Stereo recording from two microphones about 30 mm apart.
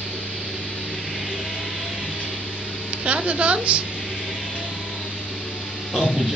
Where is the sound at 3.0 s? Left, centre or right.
Right.